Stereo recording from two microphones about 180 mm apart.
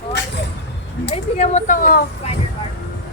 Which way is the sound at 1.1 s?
35° left (ahead or behind).